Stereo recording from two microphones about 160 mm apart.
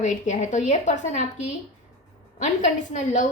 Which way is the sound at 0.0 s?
50° left (ahead or behind).